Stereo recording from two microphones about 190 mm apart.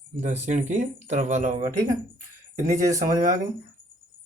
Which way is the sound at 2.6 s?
40° right (ahead or behind).